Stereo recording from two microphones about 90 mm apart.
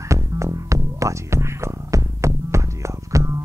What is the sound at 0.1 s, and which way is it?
Music, 35° right (ahead or behind).